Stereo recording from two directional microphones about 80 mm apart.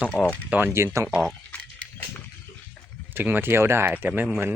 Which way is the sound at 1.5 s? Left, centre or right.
Centre.